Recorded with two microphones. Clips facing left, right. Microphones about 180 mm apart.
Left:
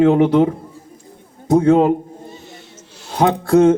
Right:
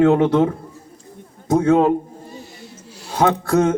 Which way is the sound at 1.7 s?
20° left (ahead or behind).